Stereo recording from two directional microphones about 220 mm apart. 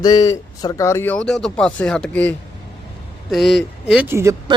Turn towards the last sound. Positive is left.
turn(degrees=-15)  # may be behind; listen again after turning